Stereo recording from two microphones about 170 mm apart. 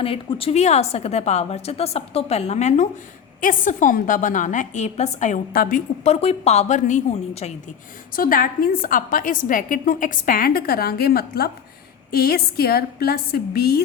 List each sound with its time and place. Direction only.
0.0 s a woman's voice: 35° left (ahead or behind)
5.5 s a woman's voice: 55° left (ahead or behind)
8.1 s a woman's voice: 55° left (ahead or behind)